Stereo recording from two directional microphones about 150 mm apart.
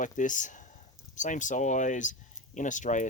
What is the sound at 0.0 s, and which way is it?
Speech, 60° left (ahead or behind).